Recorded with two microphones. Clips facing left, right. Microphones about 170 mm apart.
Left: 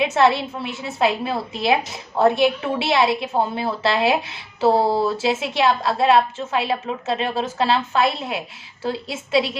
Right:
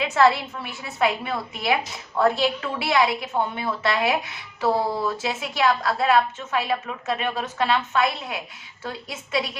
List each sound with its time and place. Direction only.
0.0 s a woman's voice: 25° left (ahead or behind)